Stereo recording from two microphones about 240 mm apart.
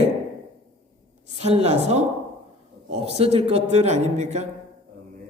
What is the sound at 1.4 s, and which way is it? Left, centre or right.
Speech, right.